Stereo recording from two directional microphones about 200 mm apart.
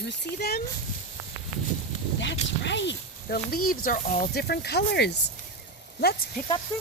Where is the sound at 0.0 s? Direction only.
55° left (ahead or behind).